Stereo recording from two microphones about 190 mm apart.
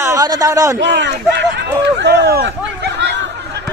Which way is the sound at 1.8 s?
60° right (ahead or behind).